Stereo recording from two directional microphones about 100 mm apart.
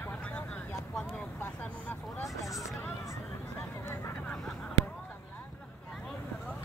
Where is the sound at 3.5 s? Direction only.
25° left (ahead or behind).